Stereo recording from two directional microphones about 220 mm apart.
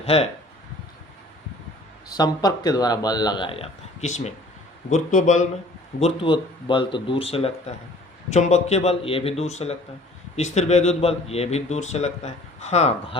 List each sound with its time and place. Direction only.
0.0 s speech: 25° left (ahead or behind)
2.0 s speech: 15° left (ahead or behind)